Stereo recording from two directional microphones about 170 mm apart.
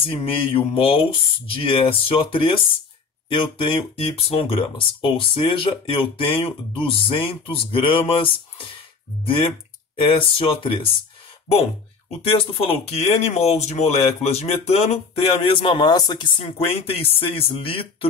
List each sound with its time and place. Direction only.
0.0 s speech: 30° left (ahead or behind)
12.2 s speech: 35° left (ahead or behind)